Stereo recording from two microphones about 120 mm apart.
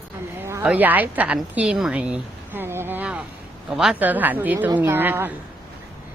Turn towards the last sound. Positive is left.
turn(degrees=-15)  # may be behind; listen again after turning